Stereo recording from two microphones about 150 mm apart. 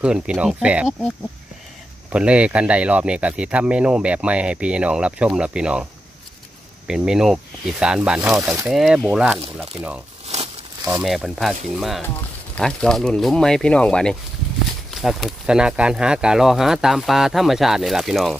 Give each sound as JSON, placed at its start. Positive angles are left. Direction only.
{"t": 0.0, "sound": "speech", "side_deg": -5}
{"t": 6.9, "sound": "speech", "side_deg": -5}
{"t": 10.2, "sound": "crumpling", "side_deg": -45}
{"t": 10.9, "sound": "speech", "side_deg": -5}